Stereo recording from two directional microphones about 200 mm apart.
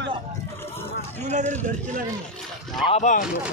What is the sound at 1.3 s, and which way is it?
Speech, 35° right (ahead or behind).